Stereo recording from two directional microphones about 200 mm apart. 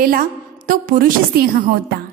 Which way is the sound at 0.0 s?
45° right (ahead or behind).